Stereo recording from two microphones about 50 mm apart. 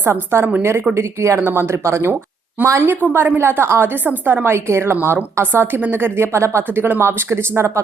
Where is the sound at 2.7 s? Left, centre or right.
Right.